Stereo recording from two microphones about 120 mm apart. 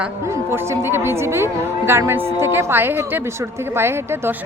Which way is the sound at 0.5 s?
20° right (ahead or behind).